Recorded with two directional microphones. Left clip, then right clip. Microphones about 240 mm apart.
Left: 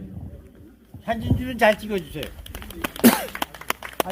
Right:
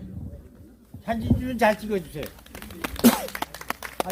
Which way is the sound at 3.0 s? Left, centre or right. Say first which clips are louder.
Left 3 dB; centre.